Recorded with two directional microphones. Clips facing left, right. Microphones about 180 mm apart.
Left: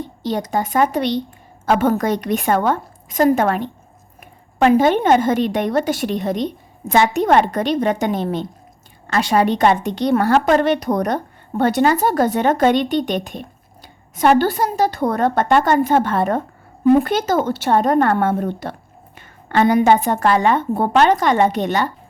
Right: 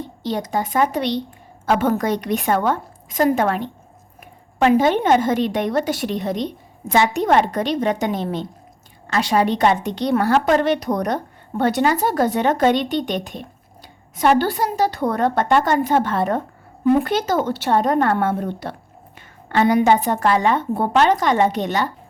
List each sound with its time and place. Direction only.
0.2 s a woman's voice: 45° left (ahead or behind)
4.6 s a woman's voice: 50° left (ahead or behind)